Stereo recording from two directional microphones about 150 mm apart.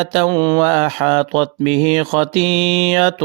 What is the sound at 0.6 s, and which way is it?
Speech, 45° right (ahead or behind).